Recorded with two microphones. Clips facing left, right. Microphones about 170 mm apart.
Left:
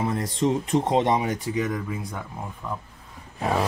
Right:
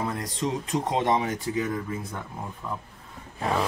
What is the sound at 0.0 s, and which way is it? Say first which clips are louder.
Speech: left 5 dB; 25° left (ahead or behind).